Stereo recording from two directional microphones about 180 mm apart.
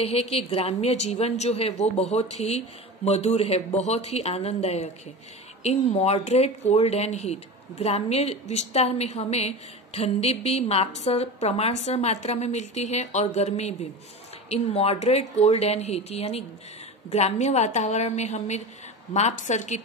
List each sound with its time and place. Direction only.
0.0 s a woman's voice: 35° left (ahead or behind)